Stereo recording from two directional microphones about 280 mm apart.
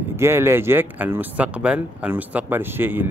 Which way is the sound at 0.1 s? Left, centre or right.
Centre.